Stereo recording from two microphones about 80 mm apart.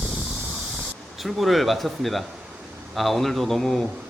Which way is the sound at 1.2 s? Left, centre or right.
Centre.